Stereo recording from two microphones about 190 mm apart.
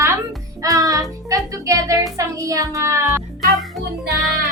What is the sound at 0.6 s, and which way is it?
Music, 15° right (ahead or behind).